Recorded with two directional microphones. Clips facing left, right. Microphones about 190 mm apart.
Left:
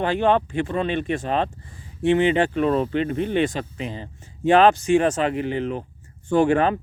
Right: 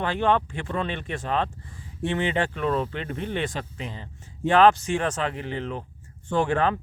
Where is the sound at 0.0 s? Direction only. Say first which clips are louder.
Left 4 dB; 15° left (ahead or behind).